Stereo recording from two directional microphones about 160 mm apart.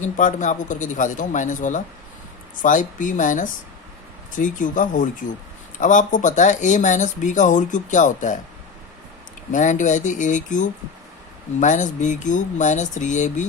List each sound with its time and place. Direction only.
0.0 s speech: 50° left (ahead or behind)
9.5 s speech: 50° left (ahead or behind)